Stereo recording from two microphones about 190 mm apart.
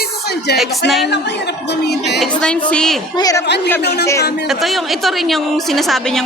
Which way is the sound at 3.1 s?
20° left (ahead or behind).